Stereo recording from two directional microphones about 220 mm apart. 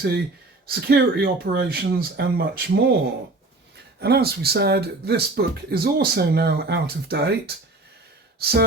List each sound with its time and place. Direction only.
0.7 s speech: 45° right (ahead or behind)
4.0 s speech: 45° right (ahead or behind)
8.4 s a sound: 45° right (ahead or behind)